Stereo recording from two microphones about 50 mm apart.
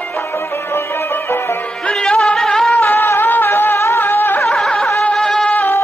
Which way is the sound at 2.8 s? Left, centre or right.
Left.